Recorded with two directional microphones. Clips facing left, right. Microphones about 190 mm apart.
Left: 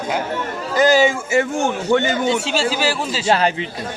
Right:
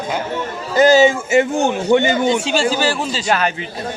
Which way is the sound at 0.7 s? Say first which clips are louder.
Right 3 dB; 25° right (ahead or behind).